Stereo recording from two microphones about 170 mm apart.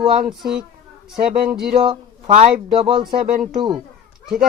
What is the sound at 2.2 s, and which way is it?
Speech, 50° right (ahead or behind).